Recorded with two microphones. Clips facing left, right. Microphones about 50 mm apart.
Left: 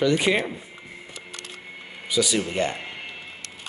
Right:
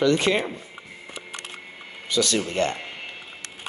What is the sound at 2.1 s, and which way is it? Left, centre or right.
Speech, centre.